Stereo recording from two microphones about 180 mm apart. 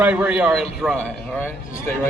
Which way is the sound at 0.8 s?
Centre (ahead or behind).